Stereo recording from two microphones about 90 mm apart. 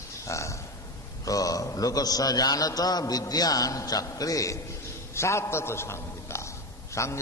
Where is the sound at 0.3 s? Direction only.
35° left (ahead or behind).